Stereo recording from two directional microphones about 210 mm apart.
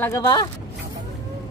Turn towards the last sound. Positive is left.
turn(degrees=15)  # may be behind; listen again after turning